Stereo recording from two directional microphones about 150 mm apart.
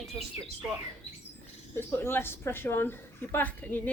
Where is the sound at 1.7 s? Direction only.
15° left (ahead or behind).